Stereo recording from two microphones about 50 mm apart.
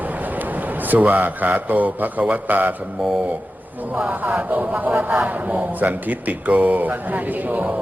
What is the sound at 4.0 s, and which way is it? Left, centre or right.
Speech, right.